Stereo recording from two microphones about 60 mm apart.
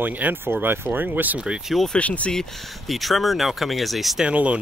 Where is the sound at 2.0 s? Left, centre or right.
Left.